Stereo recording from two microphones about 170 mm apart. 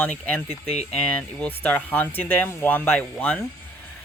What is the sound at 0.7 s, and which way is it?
Speech, 40° left (ahead or behind).